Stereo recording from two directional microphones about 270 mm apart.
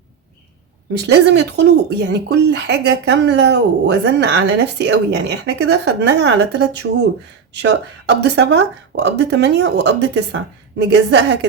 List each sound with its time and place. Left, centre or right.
1.0 s speech: right